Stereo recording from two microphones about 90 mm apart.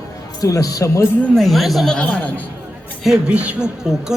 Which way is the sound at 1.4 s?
Centre (ahead or behind).